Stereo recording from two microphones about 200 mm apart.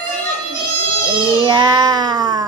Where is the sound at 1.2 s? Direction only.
20° right (ahead or behind).